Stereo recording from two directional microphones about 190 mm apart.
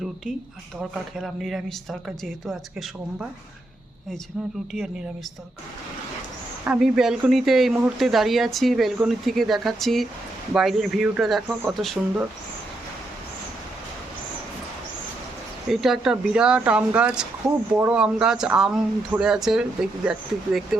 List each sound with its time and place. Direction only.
0.8 s speech: centre (ahead or behind)
6.7 s speech: centre (ahead or behind)
15.7 s speech: centre (ahead or behind)
17.4 s speech: 20° right (ahead or behind)
17.7 s speech: 10° right (ahead or behind)